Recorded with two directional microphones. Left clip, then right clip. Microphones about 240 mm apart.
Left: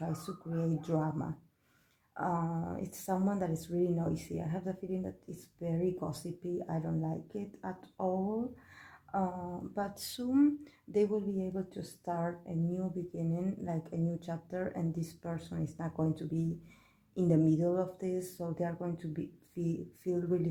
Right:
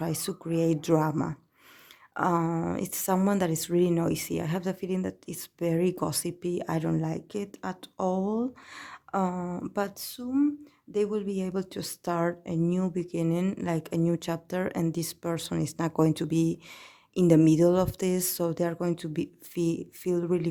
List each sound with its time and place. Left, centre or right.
0.0 s speech: right
10.1 s speech: centre
11.1 s speech: right